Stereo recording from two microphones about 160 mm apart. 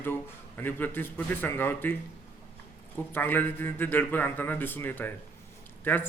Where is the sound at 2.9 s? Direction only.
10° left (ahead or behind).